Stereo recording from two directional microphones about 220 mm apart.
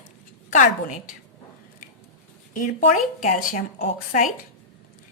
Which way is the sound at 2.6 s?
35° left (ahead or behind).